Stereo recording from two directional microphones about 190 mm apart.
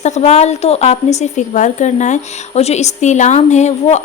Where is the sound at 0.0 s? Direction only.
35° left (ahead or behind).